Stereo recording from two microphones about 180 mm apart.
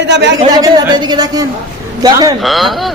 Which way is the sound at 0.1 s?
75° right (ahead or behind).